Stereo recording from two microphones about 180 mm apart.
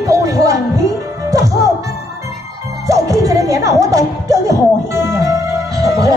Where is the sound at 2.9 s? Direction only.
20° right (ahead or behind).